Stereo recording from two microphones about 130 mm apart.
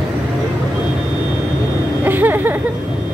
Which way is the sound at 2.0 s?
15° right (ahead or behind).